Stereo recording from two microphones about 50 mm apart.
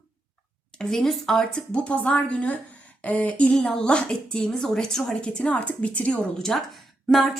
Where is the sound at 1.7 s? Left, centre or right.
Left.